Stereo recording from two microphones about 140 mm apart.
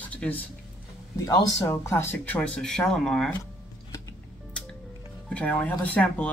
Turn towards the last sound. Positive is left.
turn(degrees=10)  # may be behind; listen again after turning